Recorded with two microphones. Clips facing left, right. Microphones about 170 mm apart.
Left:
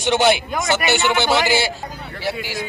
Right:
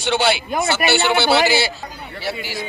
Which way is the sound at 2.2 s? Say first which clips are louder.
Left 2 dB; 15° left (ahead or behind).